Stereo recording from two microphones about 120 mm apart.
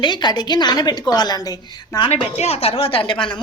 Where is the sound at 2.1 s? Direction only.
65° left (ahead or behind); by 3.2 s 50° left (ahead or behind).